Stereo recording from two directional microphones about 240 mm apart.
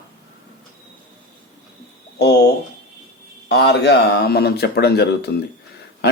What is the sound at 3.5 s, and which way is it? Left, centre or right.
Speech, left.